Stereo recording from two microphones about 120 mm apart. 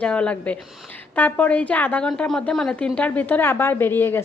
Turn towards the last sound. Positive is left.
turn(degrees=20)  # may be behind; listen again after turning